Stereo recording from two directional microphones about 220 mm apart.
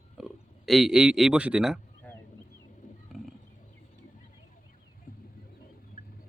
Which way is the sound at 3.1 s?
Centre (ahead or behind).